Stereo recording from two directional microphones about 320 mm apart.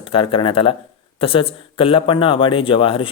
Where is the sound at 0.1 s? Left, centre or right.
Centre.